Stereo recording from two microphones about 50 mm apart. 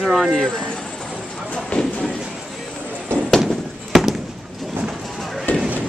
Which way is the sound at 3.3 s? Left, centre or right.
Centre.